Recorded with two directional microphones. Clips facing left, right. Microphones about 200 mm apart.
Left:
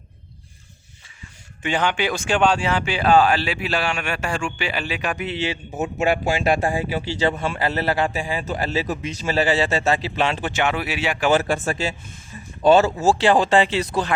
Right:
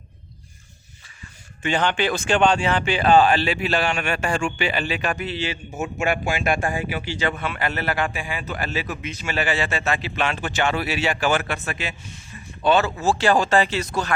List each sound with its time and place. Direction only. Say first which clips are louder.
1.6 s speech: even; 10° left (ahead or behind)
5.1 s a man's voice: left 2 dB; 20° left (ahead or behind)
10.4 s speech: left 1 dB; 15° left (ahead or behind)
11.3 s a man's voice: left 4 dB; 35° left (ahead or behind)